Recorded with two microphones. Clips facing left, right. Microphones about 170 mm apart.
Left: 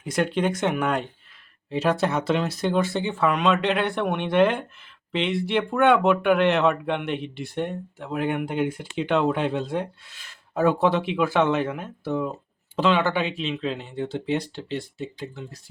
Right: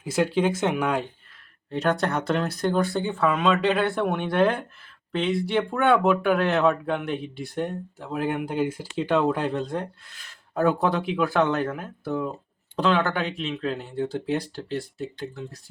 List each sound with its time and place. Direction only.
0.0 s speech: 5° right (ahead or behind)